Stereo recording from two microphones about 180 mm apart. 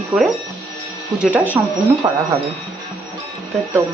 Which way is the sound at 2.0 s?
20° right (ahead or behind).